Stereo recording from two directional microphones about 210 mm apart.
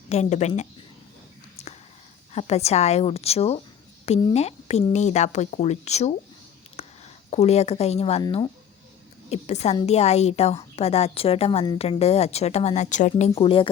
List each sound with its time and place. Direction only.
0.1 s speech: 30° left (ahead or behind)
1.6 s whispering: 30° left (ahead or behind)
2.3 s speech: 30° left (ahead or behind)
6.7 s a sound: 30° left (ahead or behind)
8.2 s a woman's voice: 20° left (ahead or behind)
9.3 s a woman's voice: 30° left (ahead or behind)